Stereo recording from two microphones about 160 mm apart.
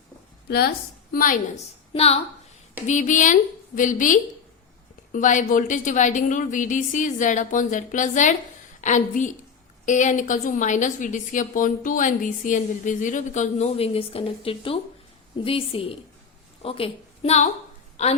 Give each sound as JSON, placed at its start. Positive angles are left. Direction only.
{"t": 0.4, "sound": "a woman's voice", "side_deg": 80}
{"t": 1.1, "sound": "a woman's voice", "side_deg": 60}
{"t": 1.9, "sound": "a woman's voice", "side_deg": 40}
{"t": 17.9, "sound": "a sound", "side_deg": 45}